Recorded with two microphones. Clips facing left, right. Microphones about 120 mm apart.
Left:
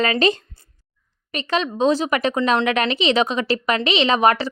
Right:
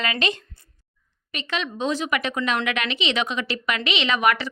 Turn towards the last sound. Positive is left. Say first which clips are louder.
# left 5 dB
turn(degrees=35)  # may be behind; listen again after turning